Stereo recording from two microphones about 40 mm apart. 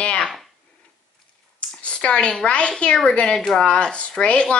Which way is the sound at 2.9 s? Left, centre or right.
Centre.